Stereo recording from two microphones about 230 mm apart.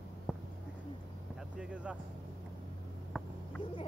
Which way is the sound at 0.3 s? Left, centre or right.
Centre.